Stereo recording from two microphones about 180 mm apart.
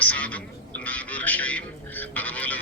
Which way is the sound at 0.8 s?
10° left (ahead or behind).